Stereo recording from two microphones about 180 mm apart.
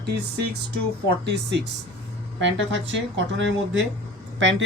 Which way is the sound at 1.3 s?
75° right (ahead or behind).